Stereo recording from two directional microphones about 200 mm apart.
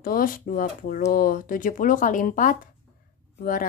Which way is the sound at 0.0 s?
45° left (ahead or behind).